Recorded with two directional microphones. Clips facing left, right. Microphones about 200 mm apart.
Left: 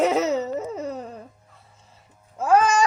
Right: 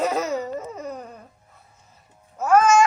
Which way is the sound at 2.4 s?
30° left (ahead or behind).